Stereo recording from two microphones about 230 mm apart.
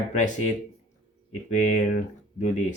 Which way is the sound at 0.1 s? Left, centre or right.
Left.